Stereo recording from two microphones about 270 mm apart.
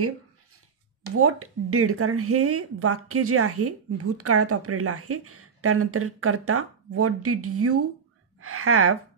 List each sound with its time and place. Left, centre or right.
1.1 s a woman's voice: right